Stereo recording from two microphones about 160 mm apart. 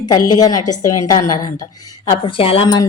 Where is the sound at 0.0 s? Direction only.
25° left (ahead or behind).